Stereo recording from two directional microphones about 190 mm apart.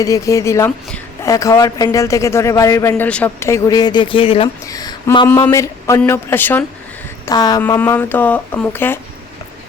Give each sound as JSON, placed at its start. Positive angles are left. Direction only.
{"t": 0.0, "sound": "a man's voice", "side_deg": 15}